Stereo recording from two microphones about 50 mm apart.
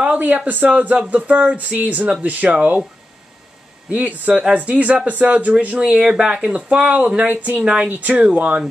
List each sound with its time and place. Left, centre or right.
0.0 s a sound: right
0.7 s speech: right
3.9 s speech: right
5.8 s speech: centre
6.4 s speech: right
7.6 s speech: centre
8.0 s speech: right